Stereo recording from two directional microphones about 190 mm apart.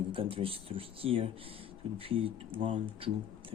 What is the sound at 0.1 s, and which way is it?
Speech, 30° right (ahead or behind).